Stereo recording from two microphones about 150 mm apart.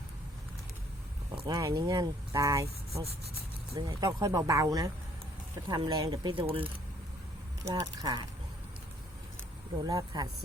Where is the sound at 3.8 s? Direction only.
25° right (ahead or behind).